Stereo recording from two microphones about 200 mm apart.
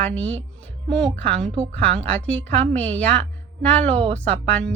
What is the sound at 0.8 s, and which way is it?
Speech, 5° left (ahead or behind).